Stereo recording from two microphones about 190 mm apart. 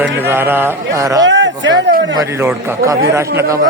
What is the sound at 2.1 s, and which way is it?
Speech, 15° right (ahead or behind).